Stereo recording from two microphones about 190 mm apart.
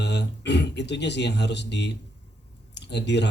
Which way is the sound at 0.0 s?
65° left (ahead or behind).